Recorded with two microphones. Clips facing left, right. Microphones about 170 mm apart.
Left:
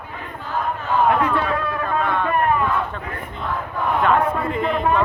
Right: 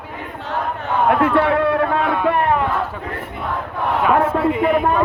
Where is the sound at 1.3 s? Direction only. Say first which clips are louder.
Right 7 dB; 70° right (ahead or behind).